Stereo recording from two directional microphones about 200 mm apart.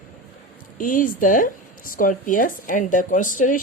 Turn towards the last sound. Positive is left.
turn(degrees=40)  # may be behind; listen again after turning